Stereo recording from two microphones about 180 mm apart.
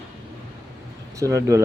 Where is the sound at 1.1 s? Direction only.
15° right (ahead or behind).